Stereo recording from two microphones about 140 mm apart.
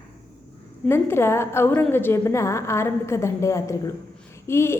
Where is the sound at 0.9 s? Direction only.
20° left (ahead or behind).